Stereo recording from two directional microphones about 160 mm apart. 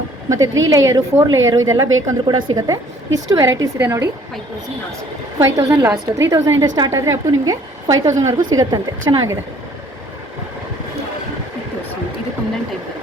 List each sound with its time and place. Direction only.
0.3 s a woman's voice: 20° right (ahead or behind)
5.4 s a woman's voice: 15° right (ahead or behind)